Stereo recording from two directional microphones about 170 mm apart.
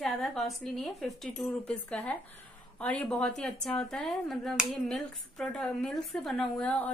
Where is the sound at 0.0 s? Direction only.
5° left (ahead or behind).